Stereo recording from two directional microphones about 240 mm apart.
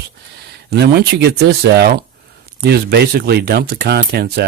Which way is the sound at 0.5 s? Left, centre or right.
Right.